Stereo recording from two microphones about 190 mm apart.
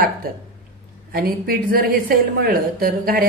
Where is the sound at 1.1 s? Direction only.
50° right (ahead or behind).